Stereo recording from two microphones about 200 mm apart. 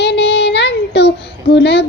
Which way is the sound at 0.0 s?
55° left (ahead or behind).